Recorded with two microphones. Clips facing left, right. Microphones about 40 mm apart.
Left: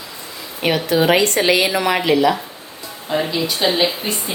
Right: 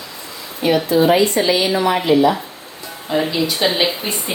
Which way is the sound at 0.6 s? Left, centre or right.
Left.